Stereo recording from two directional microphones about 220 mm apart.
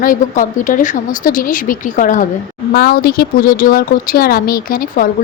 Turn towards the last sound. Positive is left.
turn(degrees=40)  # may be behind; listen again after turning